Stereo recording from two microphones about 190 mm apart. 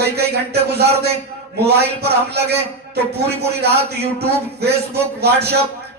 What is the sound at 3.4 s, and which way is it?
Speech, 60° right (ahead or behind).